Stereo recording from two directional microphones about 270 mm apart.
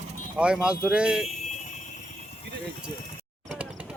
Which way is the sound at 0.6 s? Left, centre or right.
Centre.